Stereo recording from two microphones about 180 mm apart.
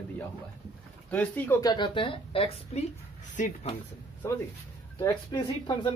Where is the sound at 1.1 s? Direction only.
10° left (ahead or behind).